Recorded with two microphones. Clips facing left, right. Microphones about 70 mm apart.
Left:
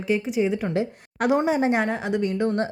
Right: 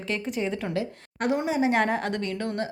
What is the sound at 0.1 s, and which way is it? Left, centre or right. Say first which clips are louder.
Speech: left 6 dB; centre.